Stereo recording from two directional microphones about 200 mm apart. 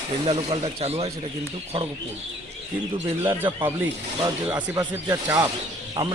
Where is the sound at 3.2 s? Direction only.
20° right (ahead or behind).